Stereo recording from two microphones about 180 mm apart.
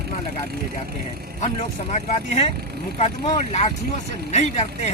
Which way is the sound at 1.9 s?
40° left (ahead or behind).